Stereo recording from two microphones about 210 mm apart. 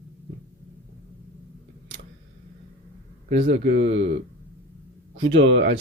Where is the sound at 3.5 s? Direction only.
60° right (ahead or behind).